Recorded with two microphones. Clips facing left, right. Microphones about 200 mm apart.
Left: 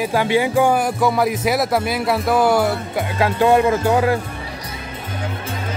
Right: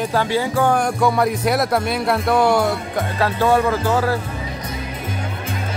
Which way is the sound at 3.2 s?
15° left (ahead or behind).